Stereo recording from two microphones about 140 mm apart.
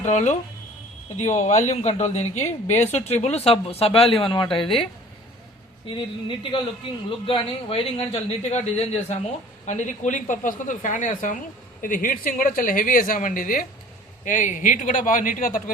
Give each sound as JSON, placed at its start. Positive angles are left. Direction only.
{"t": 0.0, "sound": "a woman's voice", "side_deg": 55}
{"t": 5.9, "sound": "a woman's voice", "side_deg": 40}
{"t": 14.3, "sound": "speech", "side_deg": 65}